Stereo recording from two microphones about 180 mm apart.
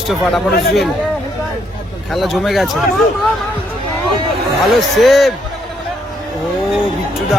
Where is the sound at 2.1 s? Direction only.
Centre (ahead or behind).